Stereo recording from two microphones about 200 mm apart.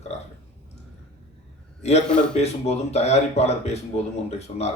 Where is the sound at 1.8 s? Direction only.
35° left (ahead or behind).